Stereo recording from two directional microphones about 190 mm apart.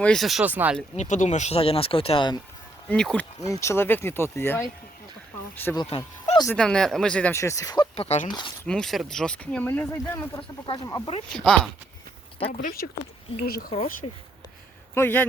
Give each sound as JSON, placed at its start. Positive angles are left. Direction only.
{"t": 0.0, "sound": "speech", "side_deg": 0}
{"t": 0.9, "sound": "speech", "side_deg": 40}
{"t": 2.9, "sound": "speech", "side_deg": 5}
{"t": 3.4, "sound": "speech", "side_deg": 15}
{"t": 6.3, "sound": "speech", "side_deg": 20}
{"t": 6.6, "sound": "speech", "side_deg": 5}
{"t": 7.9, "sound": "speech", "side_deg": 35}
{"t": 8.6, "sound": "speech", "side_deg": 5}
{"t": 10.7, "sound": "speech", "side_deg": 25}
{"t": 11.3, "sound": "speech", "side_deg": 5}
{"t": 12.6, "sound": "speech", "side_deg": 50}
{"t": 14.0, "sound": "speech", "side_deg": 30}
{"t": 14.9, "sound": "speech", "side_deg": 10}